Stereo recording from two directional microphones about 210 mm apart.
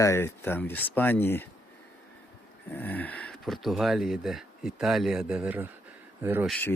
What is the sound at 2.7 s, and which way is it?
Speech, 10° left (ahead or behind).